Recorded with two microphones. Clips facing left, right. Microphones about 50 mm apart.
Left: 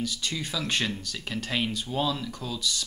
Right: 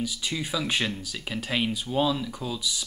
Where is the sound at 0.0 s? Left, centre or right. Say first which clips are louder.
Right 1 dB; centre.